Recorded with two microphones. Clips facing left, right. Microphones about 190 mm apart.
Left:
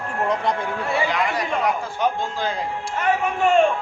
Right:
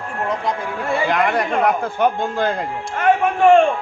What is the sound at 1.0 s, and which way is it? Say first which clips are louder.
A man's voice: right 5 dB; 55° right (ahead or behind).